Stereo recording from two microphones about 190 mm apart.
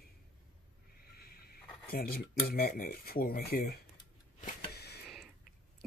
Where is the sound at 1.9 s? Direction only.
55° left (ahead or behind).